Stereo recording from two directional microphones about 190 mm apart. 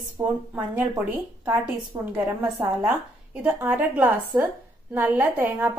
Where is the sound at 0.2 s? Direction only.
25° right (ahead or behind).